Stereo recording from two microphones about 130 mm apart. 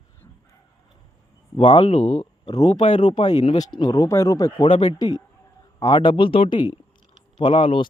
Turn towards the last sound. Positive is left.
turn(degrees=40)  # may be behind; listen again after turning